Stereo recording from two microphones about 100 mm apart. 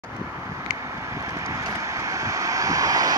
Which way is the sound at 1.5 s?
35° right (ahead or behind).